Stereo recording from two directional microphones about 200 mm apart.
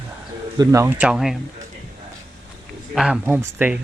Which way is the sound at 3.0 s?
5° right (ahead or behind).